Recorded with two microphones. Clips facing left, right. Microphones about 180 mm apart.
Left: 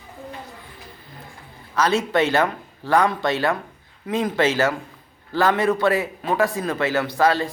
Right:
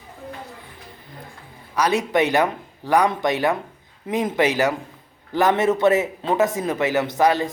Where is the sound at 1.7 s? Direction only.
15° right (ahead or behind).